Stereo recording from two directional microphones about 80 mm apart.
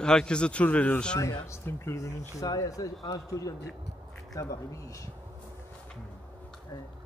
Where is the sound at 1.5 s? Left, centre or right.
Left.